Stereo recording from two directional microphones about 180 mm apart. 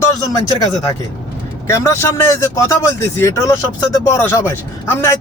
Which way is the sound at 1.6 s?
15° left (ahead or behind).